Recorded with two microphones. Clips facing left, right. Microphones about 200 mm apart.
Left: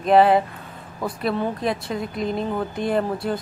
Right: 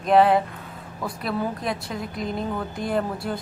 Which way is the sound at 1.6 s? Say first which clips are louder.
Left 4 dB; centre (ahead or behind).